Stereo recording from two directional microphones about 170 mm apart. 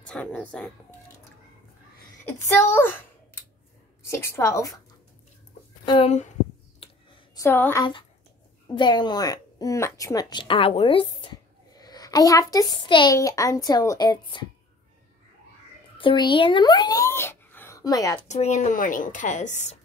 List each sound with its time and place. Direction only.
0.0 s a woman's voice: 5° left (ahead or behind)
2.2 s a child's voice: 15° left (ahead or behind)
5.9 s speech: 35° left (ahead or behind)
7.3 s a woman's voice: 15° left (ahead or behind)
8.6 s a child's voice: 25° left (ahead or behind)
11.7 s a child's voice: 20° left (ahead or behind)
16.0 s speech: 30° left (ahead or behind)
18.3 s a woman's voice: 40° left (ahead or behind)